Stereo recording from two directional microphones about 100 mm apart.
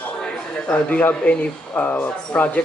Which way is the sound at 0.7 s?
15° left (ahead or behind).